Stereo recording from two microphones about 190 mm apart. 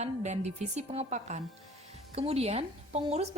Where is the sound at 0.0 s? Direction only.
35° right (ahead or behind).